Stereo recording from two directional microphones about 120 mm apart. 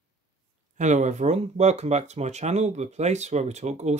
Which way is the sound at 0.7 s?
80° right.